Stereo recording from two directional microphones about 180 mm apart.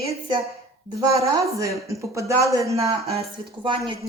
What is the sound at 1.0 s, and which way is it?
Speech, 15° right (ahead or behind).